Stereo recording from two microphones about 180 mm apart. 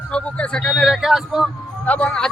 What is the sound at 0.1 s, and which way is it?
A man's voice, 5° left (ahead or behind).